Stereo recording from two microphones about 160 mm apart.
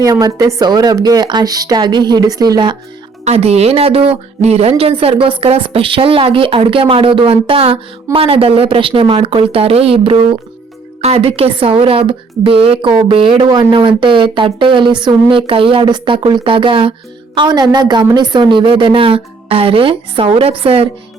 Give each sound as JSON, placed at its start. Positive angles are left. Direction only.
{"t": 0.0, "sound": "a woman's voice", "side_deg": -25}
{"t": 3.2, "sound": "a woman's voice", "side_deg": -40}